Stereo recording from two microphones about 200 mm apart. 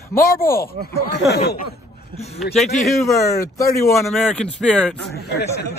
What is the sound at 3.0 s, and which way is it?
Speech, 15° left (ahead or behind).